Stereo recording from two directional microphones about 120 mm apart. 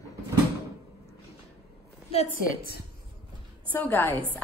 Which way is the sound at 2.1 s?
70° left (ahead or behind).